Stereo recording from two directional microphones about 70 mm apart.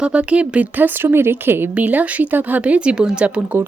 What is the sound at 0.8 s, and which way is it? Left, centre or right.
Speech, right.